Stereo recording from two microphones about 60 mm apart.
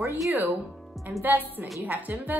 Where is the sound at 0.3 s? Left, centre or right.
Right.